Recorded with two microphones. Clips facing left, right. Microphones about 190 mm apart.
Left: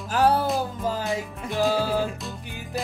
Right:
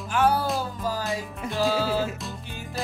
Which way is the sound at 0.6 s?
20° left (ahead or behind).